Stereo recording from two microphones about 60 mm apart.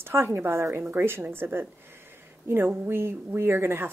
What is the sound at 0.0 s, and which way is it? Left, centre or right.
Speech, right.